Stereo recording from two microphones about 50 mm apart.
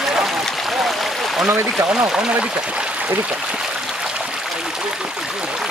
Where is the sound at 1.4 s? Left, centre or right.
Right.